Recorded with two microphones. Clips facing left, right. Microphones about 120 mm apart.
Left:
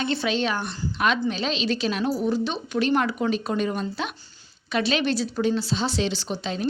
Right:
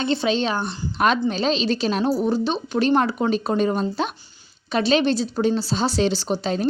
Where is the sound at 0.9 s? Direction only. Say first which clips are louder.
Right 4 dB; 40° right (ahead or behind).